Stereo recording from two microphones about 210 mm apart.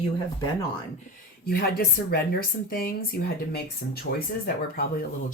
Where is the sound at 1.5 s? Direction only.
45° left (ahead or behind).